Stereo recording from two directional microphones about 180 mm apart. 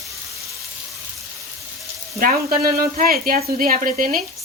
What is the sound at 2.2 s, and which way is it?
Speech, 55° right (ahead or behind).